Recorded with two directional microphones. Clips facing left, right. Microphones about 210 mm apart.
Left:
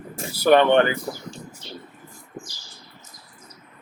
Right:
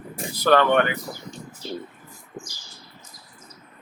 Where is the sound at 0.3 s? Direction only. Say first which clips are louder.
Left 3 dB; 15° left (ahead or behind); by 1.4 s 30° left (ahead or behind).